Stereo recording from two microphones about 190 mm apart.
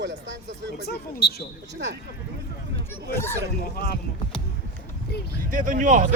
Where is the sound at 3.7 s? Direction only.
55° left (ahead or behind).